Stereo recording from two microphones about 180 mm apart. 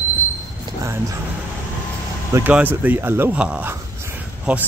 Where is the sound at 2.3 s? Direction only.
10° right (ahead or behind).